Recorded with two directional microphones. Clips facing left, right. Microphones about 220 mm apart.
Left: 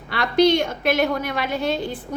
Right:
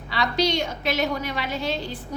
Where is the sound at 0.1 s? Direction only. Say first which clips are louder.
Left 6 dB; 55° left (ahead or behind).